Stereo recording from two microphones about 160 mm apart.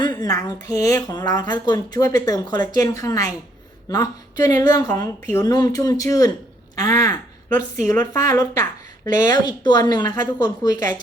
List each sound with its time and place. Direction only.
0.0 s speech: 25° left (ahead or behind)